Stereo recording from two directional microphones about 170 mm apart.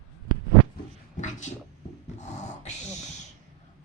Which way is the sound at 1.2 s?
45° left (ahead or behind).